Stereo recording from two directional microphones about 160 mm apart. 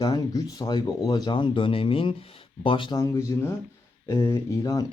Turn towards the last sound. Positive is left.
turn(degrees=20)  # may be behind; listen again after turning